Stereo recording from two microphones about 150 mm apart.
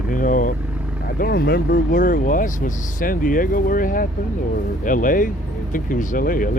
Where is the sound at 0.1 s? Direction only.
65° left (ahead or behind).